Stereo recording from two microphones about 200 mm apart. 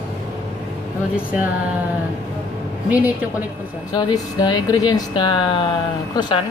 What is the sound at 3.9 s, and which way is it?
Speech, 20° left (ahead or behind).